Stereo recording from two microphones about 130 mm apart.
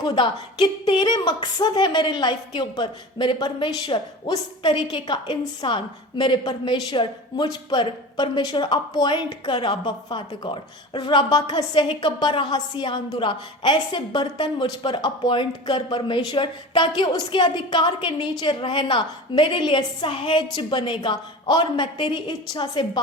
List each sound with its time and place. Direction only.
0.0 s speech: 35° left (ahead or behind)